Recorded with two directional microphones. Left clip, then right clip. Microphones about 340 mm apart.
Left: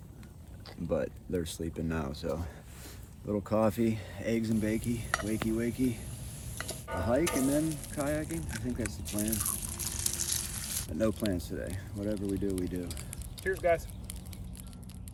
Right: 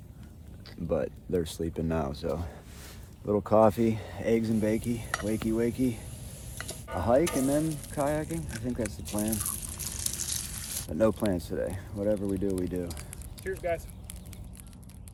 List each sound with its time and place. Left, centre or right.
0.9 s speech: centre
5.1 s stir: centre
6.6 s a sound: centre
7.3 s stir: centre
8.0 s speech: centre
8.3 s stir: centre
9.0 s water: centre
10.9 s speech: centre
13.4 s speech: centre